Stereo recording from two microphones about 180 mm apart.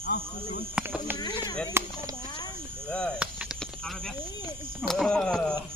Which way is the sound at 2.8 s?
5° left (ahead or behind).